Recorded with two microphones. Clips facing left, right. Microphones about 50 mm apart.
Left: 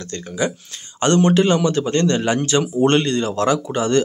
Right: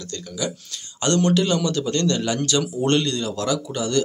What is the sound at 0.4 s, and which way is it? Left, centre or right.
A man's voice, left.